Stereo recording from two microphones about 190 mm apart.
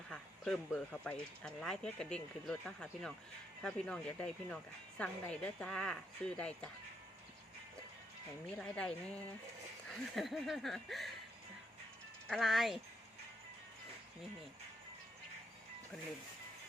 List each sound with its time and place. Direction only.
0.1 s speech: centre (ahead or behind)
8.5 s speech: 5° left (ahead or behind)
12.3 s speech: centre (ahead or behind)